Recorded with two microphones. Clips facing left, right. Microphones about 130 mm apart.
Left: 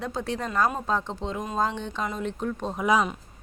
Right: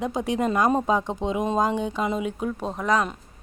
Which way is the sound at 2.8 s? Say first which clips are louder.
Even; 5° left (ahead or behind).